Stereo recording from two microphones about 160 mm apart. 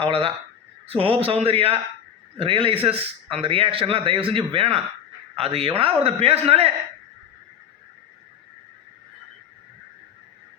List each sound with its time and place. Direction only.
0.0 s speech: 35° right (ahead or behind)